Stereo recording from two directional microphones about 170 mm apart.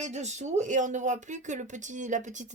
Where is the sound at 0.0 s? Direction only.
40° right (ahead or behind).